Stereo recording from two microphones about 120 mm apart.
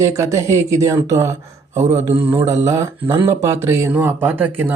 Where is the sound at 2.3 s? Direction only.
20° right (ahead or behind).